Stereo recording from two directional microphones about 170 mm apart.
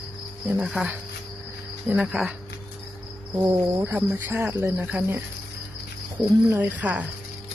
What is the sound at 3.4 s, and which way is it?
Cricket, 15° right (ahead or behind).